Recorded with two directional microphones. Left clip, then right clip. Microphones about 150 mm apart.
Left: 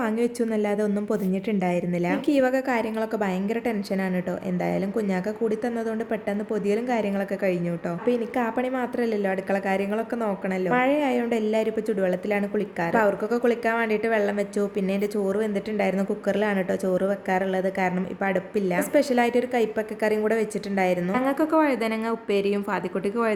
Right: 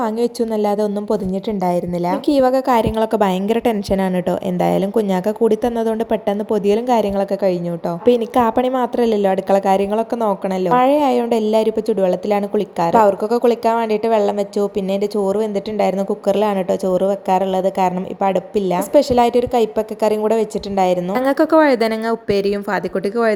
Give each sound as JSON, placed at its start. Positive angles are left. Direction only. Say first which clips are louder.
{"t": 0.0, "sound": "a woman's voice", "louder": "right 6 dB", "side_deg": -20}